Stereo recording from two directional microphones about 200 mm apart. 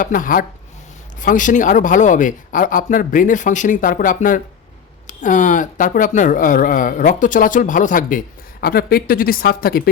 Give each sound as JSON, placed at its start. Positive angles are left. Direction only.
{"t": 0.0, "sound": "speech", "side_deg": 40}